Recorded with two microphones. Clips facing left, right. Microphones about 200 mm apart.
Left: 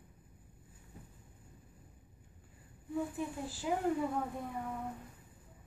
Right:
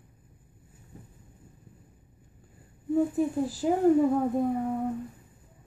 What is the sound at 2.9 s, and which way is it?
Speech, 40° right (ahead or behind).